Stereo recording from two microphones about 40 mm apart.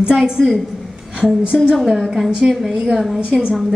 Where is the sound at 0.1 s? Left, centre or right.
Centre.